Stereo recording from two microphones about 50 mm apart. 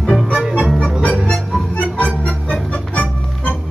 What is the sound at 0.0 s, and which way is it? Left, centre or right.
Music, centre.